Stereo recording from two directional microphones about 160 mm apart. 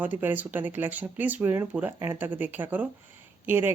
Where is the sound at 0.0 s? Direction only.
10° right (ahead or behind).